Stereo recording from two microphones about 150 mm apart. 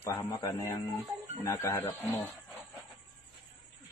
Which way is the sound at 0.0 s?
20° left (ahead or behind).